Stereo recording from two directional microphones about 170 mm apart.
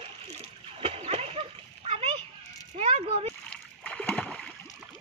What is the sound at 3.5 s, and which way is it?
Splash, 10° left (ahead or behind).